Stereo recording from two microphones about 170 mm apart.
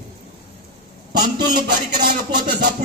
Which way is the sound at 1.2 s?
65° right (ahead or behind).